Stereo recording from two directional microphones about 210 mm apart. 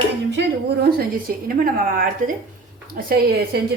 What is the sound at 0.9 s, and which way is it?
A woman's voice, 45° right (ahead or behind).